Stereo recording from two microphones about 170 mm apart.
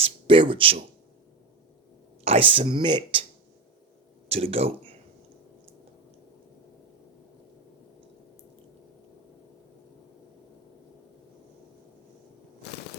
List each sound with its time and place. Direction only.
0.0 s speech: 30° right (ahead or behind)
2.2 s speech: 35° right (ahead or behind)
4.3 s speech: 35° right (ahead or behind)